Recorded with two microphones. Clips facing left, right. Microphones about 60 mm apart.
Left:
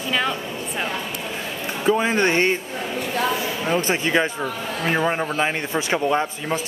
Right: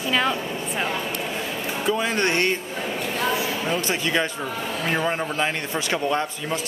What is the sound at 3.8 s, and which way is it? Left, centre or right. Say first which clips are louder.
A man's voice: left 3 dB; left.